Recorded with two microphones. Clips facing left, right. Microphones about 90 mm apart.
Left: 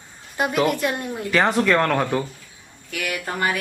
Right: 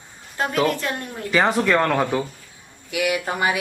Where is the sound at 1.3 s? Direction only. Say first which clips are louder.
Even; centre (ahead or behind).